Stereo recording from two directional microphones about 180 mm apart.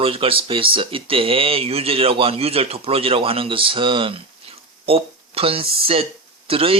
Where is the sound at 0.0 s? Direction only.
30° right (ahead or behind).